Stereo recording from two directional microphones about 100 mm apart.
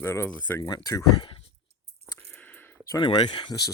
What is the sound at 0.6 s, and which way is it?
Speech, 40° left (ahead or behind).